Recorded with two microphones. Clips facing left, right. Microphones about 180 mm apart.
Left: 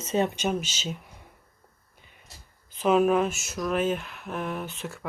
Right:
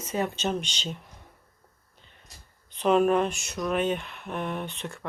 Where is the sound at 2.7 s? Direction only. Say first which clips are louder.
Even; centre (ahead or behind).